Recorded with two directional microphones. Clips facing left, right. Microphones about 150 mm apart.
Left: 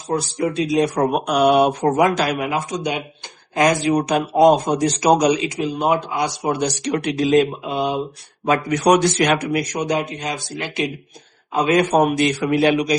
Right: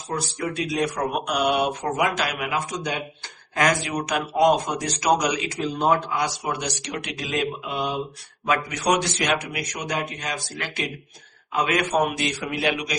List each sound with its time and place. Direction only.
0.3 s a man's voice: 25° left (ahead or behind)
0.9 s speech: 45° left (ahead or behind)
2.7 s a man's voice: 20° left (ahead or behind)
6.6 s speech: 40° left (ahead or behind)
8.7 s speech: 50° left (ahead or behind)
9.8 s a man's voice: 25° left (ahead or behind)